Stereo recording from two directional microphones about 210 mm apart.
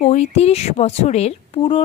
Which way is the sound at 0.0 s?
35° left (ahead or behind).